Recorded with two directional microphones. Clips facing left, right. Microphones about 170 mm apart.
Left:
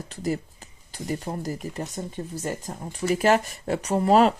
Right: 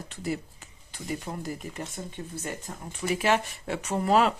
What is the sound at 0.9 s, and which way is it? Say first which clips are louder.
Speech: left 4 dB; 40° left (ahead or behind).